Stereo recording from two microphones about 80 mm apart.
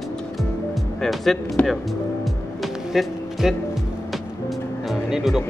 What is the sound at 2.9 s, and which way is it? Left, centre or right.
Music, centre.